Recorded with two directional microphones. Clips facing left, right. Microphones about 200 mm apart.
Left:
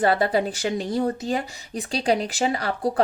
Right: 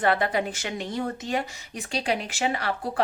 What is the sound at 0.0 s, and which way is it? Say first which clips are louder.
Speech: left 3 dB; 35° left (ahead or behind).